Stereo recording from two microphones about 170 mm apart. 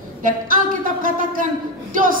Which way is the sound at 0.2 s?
55° right (ahead or behind).